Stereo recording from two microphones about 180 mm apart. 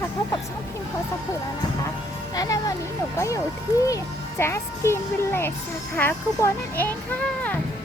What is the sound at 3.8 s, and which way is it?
A child's voice, 15° left (ahead or behind).